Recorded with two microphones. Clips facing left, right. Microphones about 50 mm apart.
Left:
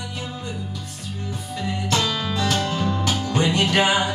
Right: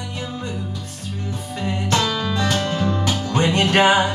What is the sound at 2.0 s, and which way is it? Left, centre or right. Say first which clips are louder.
Music: right 2 dB; centre.